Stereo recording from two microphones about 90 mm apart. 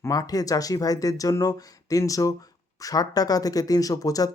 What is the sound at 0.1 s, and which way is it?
Speech, 45° left (ahead or behind).